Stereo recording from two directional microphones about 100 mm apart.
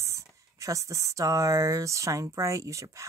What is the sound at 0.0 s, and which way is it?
Speech, 30° right (ahead or behind).